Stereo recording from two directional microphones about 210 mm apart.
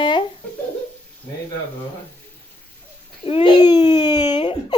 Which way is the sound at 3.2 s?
25° left (ahead or behind).